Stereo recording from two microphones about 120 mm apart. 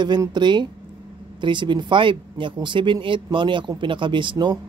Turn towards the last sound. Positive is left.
turn(degrees=-40)  # may be behind; listen again after turning